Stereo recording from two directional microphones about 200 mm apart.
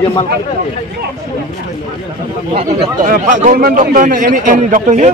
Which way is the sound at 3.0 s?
40° right (ahead or behind).